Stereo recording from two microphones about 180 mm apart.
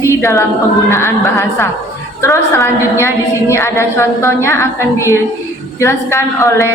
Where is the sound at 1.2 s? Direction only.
15° left (ahead or behind).